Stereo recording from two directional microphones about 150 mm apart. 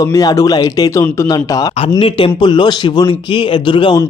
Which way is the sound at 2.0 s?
40° left (ahead or behind).